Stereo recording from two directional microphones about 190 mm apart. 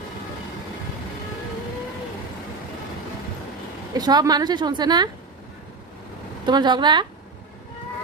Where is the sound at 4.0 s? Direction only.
20° right (ahead or behind).